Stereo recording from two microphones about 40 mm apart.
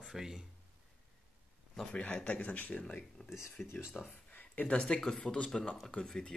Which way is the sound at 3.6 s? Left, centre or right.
Left.